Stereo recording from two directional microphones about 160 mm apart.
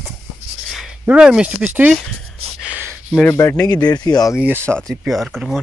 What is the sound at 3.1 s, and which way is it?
Speech, 10° left (ahead or behind).